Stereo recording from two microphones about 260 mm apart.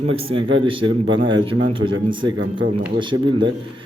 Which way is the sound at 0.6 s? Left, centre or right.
Centre.